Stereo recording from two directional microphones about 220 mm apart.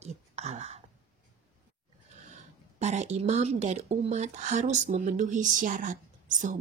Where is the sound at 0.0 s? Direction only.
30° right (ahead or behind).